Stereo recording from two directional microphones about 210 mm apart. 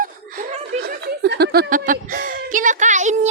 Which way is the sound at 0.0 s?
40° right (ahead or behind).